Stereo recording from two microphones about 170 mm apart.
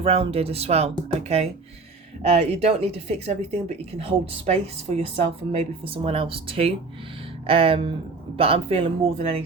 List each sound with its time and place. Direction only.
0.0 s speech: 35° right (ahead or behind)
2.2 s speech: 40° right (ahead or behind)